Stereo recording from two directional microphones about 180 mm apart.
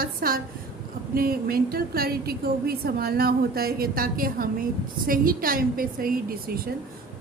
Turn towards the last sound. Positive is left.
turn(degrees=-55)  # may be behind; listen again after turning